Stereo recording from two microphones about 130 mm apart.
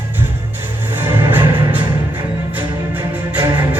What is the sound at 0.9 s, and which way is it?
Music, 15° right (ahead or behind).